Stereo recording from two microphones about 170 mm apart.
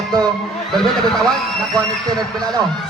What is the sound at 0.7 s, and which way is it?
Speech, centre (ahead or behind).